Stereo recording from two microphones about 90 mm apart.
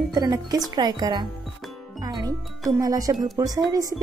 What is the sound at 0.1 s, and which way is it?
A woman's voice, 40° right (ahead or behind).